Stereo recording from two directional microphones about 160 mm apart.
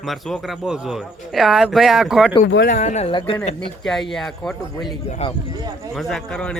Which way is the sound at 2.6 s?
45° left (ahead or behind).